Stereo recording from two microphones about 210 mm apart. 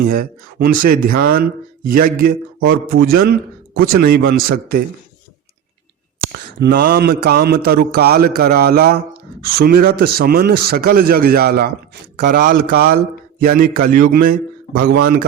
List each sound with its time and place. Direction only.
0.0 s speech: 45° right (ahead or behind)
6.3 s a man's voice: 45° right (ahead or behind)